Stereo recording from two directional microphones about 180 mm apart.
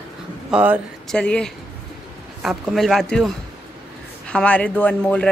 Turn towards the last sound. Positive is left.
turn(degrees=5)  # may be behind; listen again after turning